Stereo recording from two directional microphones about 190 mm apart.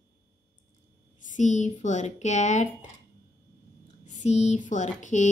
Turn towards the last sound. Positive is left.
turn(degrees=40)  # may be behind; listen again after turning